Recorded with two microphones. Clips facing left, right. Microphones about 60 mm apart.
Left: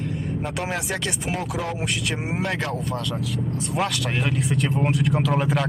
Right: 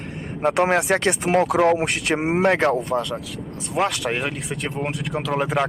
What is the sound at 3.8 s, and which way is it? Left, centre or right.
Speech, centre.